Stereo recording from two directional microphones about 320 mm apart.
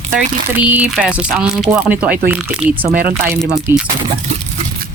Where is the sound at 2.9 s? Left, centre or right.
Right.